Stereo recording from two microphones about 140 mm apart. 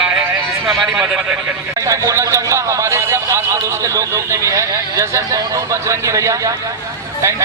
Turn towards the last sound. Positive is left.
turn(degrees=-20)  # may be behind; listen again after turning